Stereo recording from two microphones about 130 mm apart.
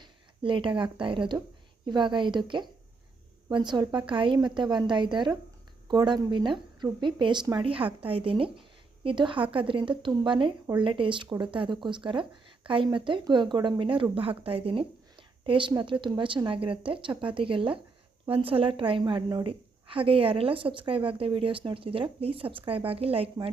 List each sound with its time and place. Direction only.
0.0 s a woman's voice: 40° right (ahead or behind)